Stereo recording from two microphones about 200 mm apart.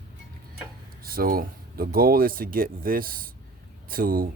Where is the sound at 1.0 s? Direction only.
45° right (ahead or behind).